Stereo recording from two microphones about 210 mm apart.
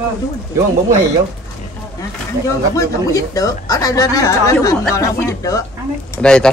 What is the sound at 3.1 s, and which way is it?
Speech, 15° left (ahead or behind).